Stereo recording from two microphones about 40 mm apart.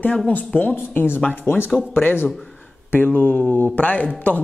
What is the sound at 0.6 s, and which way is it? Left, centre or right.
A woman's voice, left.